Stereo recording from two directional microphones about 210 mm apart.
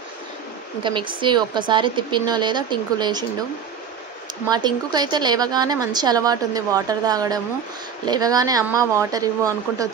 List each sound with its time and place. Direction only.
0.8 s a woman's voice: 25° right (ahead or behind)
4.5 s a woman's voice: 20° right (ahead or behind)